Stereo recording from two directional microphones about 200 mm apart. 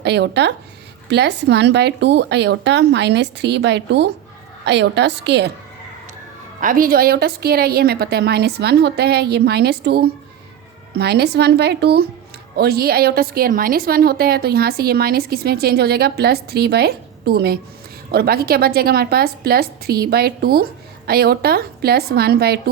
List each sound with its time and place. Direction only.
0.0 s a woman's voice: 60° right (ahead or behind)
6.6 s a woman's voice: 45° right (ahead or behind)